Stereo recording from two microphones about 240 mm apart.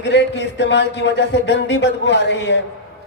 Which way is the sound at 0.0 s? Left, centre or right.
Left.